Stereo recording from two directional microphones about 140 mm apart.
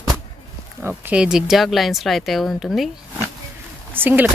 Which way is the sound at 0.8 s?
10° right (ahead or behind).